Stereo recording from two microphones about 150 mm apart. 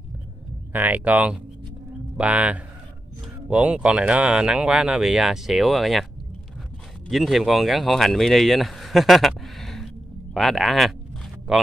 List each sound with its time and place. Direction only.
0.7 s speech: 10° right (ahead or behind)
7.1 s speech: centre (ahead or behind)